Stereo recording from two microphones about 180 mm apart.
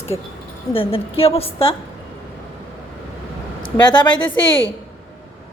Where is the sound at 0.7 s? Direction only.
30° left (ahead or behind).